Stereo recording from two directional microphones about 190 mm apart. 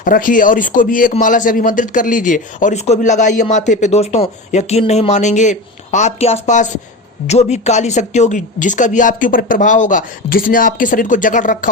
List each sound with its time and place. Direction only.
0.0 s speech: 45° left (ahead or behind)